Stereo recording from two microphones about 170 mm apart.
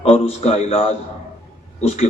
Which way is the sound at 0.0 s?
40° left (ahead or behind).